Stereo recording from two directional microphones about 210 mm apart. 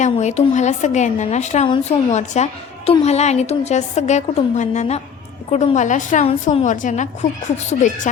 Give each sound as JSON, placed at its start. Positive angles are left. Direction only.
{"t": 0.0, "sound": "a woman's voice", "side_deg": 35}